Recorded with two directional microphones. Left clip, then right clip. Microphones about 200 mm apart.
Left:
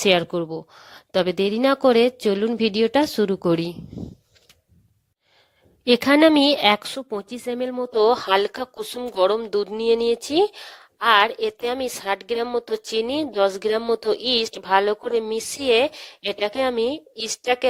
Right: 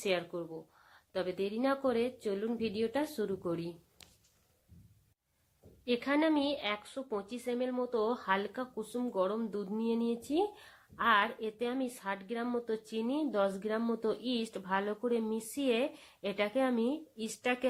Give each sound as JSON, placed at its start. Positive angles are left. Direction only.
{"t": 0.0, "sound": "a woman's voice", "side_deg": 50}
{"t": 5.8, "sound": "a woman's voice", "side_deg": 50}